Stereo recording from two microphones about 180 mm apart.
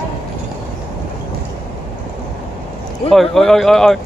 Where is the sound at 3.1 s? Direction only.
Centre (ahead or behind).